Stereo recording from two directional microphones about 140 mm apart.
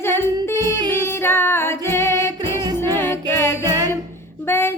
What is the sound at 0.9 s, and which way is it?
Female singing, 15° left (ahead or behind).